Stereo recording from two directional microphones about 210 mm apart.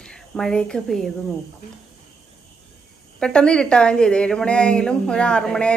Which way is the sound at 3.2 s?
5° left (ahead or behind).